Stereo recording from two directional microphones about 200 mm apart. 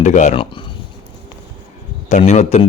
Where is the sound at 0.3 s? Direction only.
25° left (ahead or behind).